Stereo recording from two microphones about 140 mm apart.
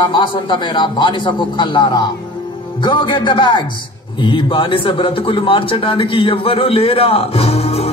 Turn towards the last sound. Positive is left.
turn(degrees=45)  # may be behind; listen again after turning